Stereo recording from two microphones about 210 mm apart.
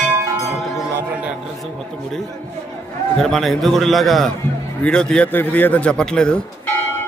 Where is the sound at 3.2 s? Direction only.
Centre (ahead or behind).